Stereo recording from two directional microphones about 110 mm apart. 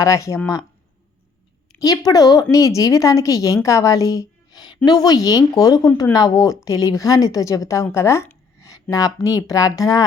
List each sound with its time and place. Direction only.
0.0 s speech: 30° left (ahead or behind)
1.8 s a woman's voice: 35° left (ahead or behind)